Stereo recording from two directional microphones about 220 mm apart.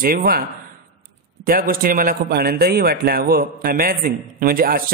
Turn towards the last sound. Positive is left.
turn(degrees=-40)  # may be behind; listen again after turning